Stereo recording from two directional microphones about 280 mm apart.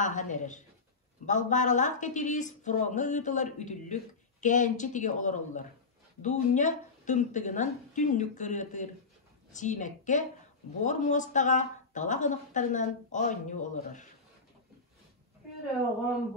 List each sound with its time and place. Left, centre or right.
0.0 s speech: left